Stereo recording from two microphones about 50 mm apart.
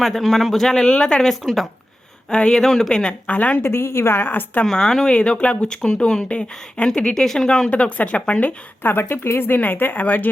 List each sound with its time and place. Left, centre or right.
0.0 s a man's voice: centre
1.2 s a man's voice: centre
2.3 s speech: centre
2.6 s speech: centre; by 3.6 s left
3.6 s speech: left
4.6 s speech: centre
7.7 s speech: left
8.8 s speech: left
9.6 s speech: left